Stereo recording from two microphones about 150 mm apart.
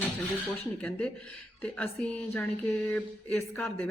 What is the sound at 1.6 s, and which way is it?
Speech, 10° left (ahead or behind).